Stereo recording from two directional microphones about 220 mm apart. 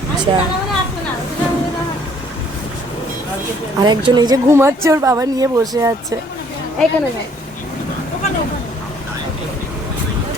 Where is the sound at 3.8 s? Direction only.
20° right (ahead or behind).